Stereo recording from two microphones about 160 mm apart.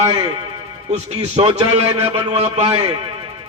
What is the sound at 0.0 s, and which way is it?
A man's voice, 40° right (ahead or behind).